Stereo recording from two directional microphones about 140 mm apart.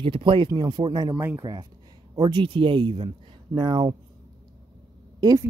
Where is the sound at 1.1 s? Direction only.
15° right (ahead or behind).